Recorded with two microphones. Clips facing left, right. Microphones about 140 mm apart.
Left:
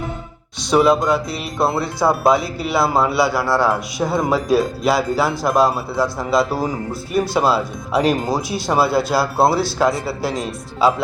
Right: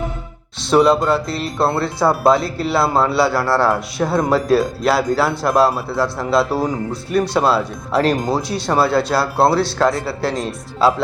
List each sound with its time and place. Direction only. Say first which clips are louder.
0.7 s speech: right 1 dB; centre (ahead or behind)